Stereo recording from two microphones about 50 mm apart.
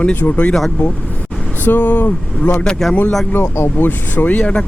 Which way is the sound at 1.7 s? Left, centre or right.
Left.